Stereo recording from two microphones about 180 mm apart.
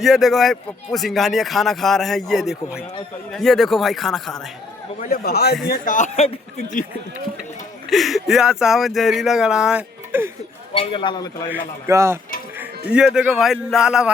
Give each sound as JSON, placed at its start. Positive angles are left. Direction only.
{"t": 0.0, "sound": "a man's voice", "side_deg": 0}
{"t": 4.9, "sound": "a man's voice", "side_deg": 50}
{"t": 5.6, "sound": "speech", "side_deg": 50}
{"t": 7.9, "sound": "a man's voice", "side_deg": 0}
{"t": 10.8, "sound": "a man's voice", "side_deg": 25}
{"t": 11.9, "sound": "speech", "side_deg": -15}
{"t": 12.5, "sound": "a man's voice", "side_deg": -5}